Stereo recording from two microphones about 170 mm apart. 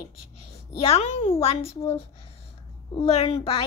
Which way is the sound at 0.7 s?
35° left (ahead or behind).